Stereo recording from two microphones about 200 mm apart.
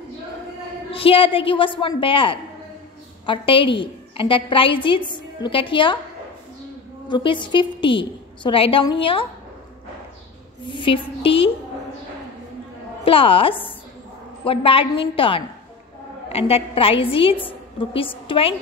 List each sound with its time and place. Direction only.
0.9 s a woman's voice: 30° left (ahead or behind)
7.1 s a woman's voice: 25° left (ahead or behind)
10.6 s a woman's voice: 25° left (ahead or behind)
13.0 s a woman's voice: 25° left (ahead or behind)